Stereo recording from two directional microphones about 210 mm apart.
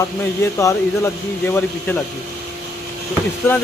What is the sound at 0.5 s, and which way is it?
Speech, 15° left (ahead or behind).